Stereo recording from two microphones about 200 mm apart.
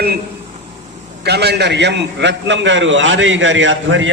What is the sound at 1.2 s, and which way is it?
A man's voice, 55° right (ahead or behind).